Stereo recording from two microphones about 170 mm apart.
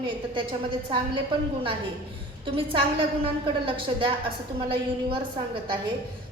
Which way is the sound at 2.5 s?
30° right (ahead or behind).